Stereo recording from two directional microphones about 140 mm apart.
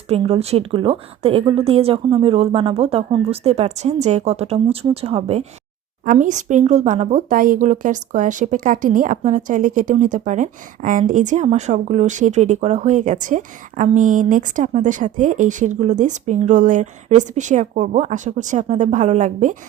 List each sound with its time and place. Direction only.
0.1 s a woman's voice: 45° right (ahead or behind)
6.1 s speech: 65° right (ahead or behind)